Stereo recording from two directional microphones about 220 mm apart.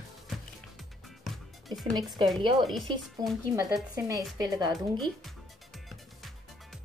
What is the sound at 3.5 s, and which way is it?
A woman's voice, 15° right (ahead or behind).